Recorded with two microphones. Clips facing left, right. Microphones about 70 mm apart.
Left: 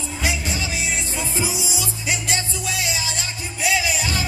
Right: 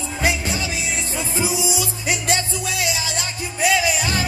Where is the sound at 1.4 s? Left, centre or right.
Right.